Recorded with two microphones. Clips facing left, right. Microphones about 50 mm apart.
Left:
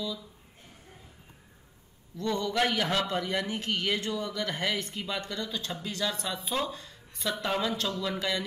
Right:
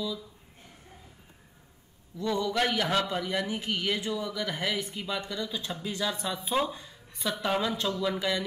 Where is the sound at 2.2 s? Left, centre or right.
Centre.